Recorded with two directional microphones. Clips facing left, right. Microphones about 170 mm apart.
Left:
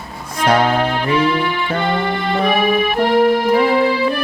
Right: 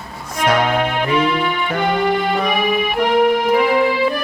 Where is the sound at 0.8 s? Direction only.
15° right (ahead or behind).